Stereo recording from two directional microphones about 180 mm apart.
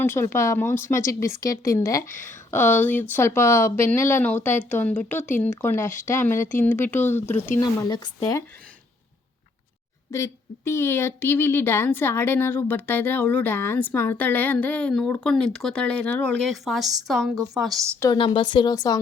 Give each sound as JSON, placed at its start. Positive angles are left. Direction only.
{"t": 0.0, "sound": "a woman's voice", "side_deg": 15}
{"t": 10.1, "sound": "a woman's voice", "side_deg": 15}
{"t": 18.0, "sound": "speech", "side_deg": 20}